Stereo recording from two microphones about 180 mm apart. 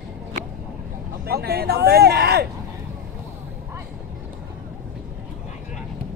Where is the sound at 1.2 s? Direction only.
60° right (ahead or behind).